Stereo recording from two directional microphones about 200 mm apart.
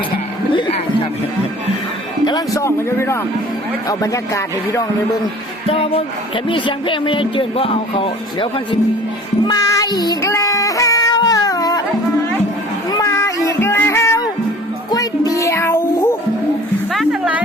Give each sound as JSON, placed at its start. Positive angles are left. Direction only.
{"t": 2.2, "sound": "speech", "side_deg": 15}
{"t": 5.6, "sound": "speech", "side_deg": 30}
{"t": 9.5, "sound": "child singing", "side_deg": 20}
{"t": 12.9, "sound": "a sound", "side_deg": 15}
{"t": 14.8, "sound": "music", "side_deg": 20}
{"t": 16.9, "sound": "music", "side_deg": 0}